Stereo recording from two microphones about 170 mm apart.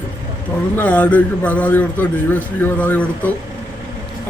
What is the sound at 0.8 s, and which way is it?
A man's voice, 10° left (ahead or behind).